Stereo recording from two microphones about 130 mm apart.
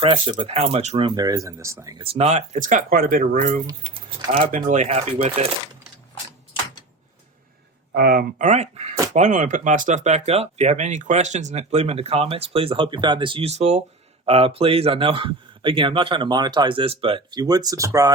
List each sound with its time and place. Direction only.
0.0 s speech: 40° right (ahead or behind)
1.0 s speech: 30° right (ahead or behind)
2.1 s speech: 60° right (ahead or behind); by 3.6 s 90° right
4.3 s speech: 65° right (ahead or behind)
4.9 s speech: 50° right (ahead or behind)
8.4 s speech: 65° right (ahead or behind)
9.1 s speech: 75° right (ahead or behind); by 18.1 s 25° right (ahead or behind)